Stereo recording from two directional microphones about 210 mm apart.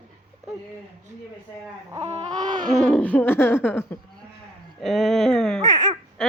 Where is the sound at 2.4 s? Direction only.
20° right (ahead or behind).